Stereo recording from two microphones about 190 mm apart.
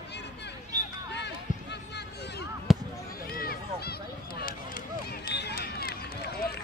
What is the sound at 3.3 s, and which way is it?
Run, 50° left (ahead or behind).